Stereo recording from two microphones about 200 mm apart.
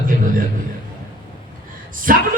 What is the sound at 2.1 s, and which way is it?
Speech, 45° right (ahead or behind).